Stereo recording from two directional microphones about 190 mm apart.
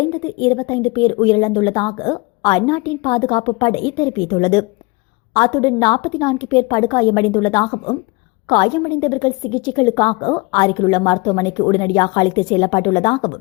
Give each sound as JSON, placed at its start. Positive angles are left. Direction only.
{"t": 0.3, "sound": "a woman's voice", "side_deg": 20}